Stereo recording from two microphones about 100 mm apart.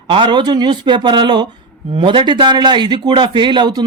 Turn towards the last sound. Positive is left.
turn(degrees=-45)  # may be behind; listen again after turning